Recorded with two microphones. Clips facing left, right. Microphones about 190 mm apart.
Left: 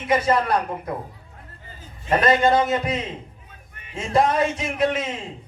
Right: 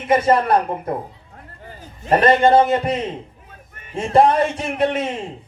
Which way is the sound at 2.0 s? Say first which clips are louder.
Right 4 dB; 35° right (ahead or behind).